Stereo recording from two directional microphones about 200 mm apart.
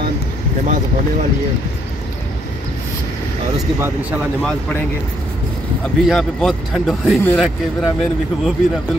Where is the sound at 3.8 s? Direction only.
5° right (ahead or behind).